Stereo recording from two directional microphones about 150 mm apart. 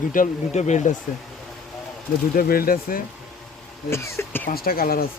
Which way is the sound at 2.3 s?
75° left (ahead or behind).